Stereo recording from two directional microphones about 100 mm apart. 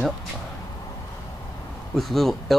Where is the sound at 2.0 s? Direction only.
Centre (ahead or behind).